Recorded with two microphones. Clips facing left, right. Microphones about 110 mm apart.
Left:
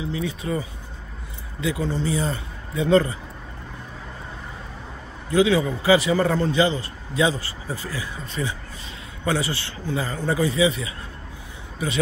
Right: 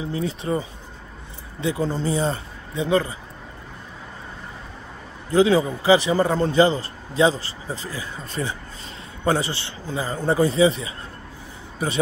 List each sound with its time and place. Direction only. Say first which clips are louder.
0.0 s speech: right 1 dB; 35° right (ahead or behind)
5.3 s speech: right 2 dB; 35° right (ahead or behind)
5.7 s speech: right 1 dB; 20° right (ahead or behind)
6.4 s speech: right 3 dB; 40° right (ahead or behind)
7.6 s speech: even; 20° right (ahead or behind)
8.0 s speech: even; 35° right (ahead or behind)
9.6 s speech: left 1 dB; 25° right (ahead or behind)